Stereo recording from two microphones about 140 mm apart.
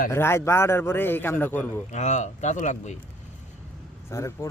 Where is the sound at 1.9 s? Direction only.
55° left (ahead or behind).